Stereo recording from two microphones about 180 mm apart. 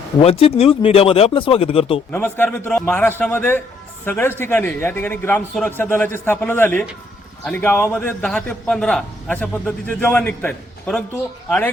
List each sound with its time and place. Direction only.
0.2 s speech: 35° left (ahead or behind)
2.1 s a man's voice: 10° left (ahead or behind)